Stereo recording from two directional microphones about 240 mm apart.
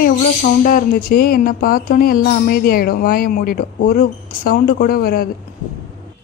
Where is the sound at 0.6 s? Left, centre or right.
Left.